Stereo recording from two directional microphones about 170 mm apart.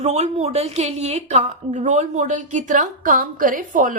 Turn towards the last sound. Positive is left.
turn(degrees=-50)  # may be behind; listen again after turning